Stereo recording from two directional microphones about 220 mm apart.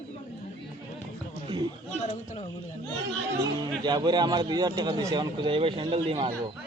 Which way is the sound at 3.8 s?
20° right (ahead or behind).